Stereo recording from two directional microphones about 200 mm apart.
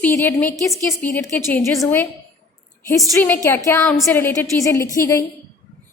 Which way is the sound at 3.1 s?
10° left (ahead or behind).